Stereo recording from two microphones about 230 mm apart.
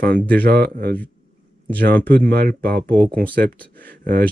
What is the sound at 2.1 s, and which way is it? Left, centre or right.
Speech, right.